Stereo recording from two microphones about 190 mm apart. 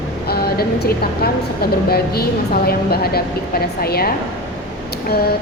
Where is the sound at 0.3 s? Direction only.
55° left (ahead or behind).